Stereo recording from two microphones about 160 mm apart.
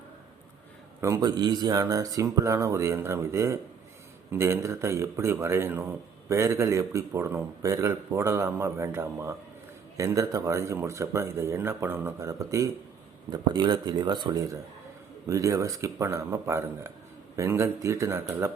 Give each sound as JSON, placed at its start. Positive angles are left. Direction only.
{"t": 1.0, "sound": "a man's voice", "side_deg": -20}